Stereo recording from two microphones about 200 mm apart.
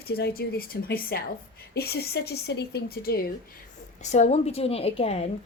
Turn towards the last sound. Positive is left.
turn(degrees=30)  # may be behind; listen again after turning